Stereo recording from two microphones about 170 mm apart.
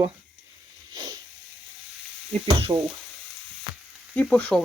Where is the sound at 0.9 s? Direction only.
25° right (ahead or behind).